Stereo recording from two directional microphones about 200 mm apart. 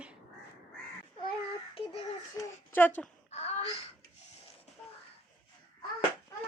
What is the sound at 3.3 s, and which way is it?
Wail, 30° left (ahead or behind).